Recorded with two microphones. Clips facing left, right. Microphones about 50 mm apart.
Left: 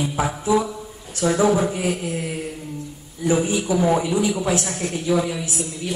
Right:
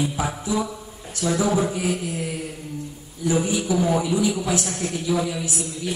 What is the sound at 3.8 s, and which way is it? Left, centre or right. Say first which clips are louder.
A woman's voice: left 3 dB; left.